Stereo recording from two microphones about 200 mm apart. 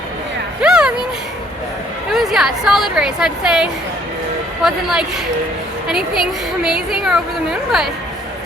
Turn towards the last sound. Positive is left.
turn(degrees=0)  # may be behind; listen again after turning